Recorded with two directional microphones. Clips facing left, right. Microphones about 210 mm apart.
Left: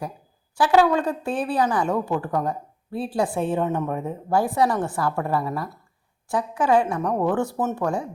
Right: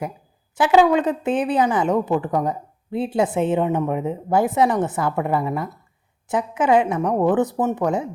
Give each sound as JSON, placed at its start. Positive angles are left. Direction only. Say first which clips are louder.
{"t": 0.5, "sound": "a woman's voice", "louder": "right 3 dB", "side_deg": -20}